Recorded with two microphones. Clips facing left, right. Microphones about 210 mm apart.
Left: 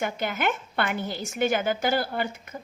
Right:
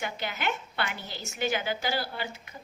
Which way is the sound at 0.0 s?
50° left (ahead or behind).